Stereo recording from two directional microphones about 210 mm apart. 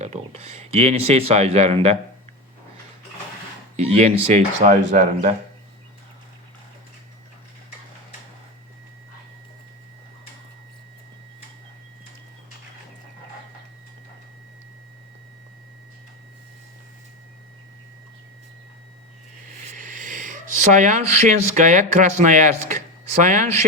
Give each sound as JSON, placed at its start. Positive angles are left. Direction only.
{"t": 0.0, "sound": "speech", "side_deg": -30}
{"t": 3.8, "sound": "speech", "side_deg": -30}
{"t": 19.4, "sound": "owl", "side_deg": -35}
{"t": 20.7, "sound": "speech", "side_deg": -35}